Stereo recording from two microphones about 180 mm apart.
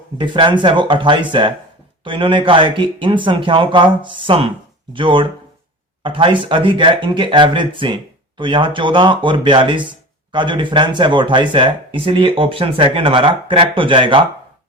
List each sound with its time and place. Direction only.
0.2 s speech: 25° right (ahead or behind)